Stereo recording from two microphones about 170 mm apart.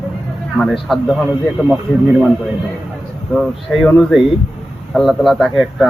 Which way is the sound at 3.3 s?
Centre (ahead or behind).